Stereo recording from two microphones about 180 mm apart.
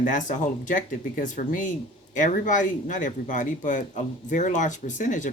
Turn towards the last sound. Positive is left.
turn(degrees=45)  # may be behind; listen again after turning